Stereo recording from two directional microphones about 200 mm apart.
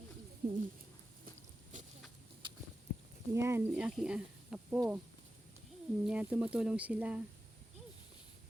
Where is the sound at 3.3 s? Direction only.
10° right (ahead or behind).